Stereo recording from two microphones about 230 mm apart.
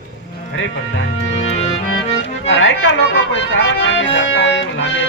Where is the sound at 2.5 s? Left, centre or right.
Left.